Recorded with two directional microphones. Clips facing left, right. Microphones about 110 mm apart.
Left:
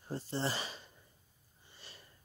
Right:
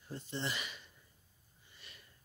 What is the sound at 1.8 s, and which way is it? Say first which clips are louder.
Sniff: left 3 dB; 30° left (ahead or behind).